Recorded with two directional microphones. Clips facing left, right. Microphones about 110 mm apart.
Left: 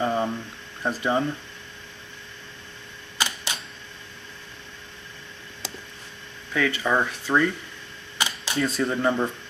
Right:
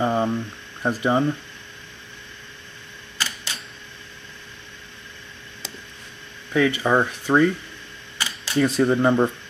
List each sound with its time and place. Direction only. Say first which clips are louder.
0.0 s a sound: right 3 dB; 15° right (ahead or behind)
0.8 s speech: right 3 dB; 15° right (ahead or behind)
3.2 s camera: left 2 dB; 20° left (ahead or behind)
6.5 s speech: right 4 dB; 20° right (ahead or behind)
8.2 s camera: left 2 dB; 20° left (ahead or behind)
8.5 s speech: right 6 dB; 20° right (ahead or behind)